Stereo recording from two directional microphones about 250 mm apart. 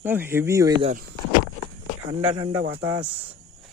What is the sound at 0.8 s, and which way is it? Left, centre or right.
Speech, right.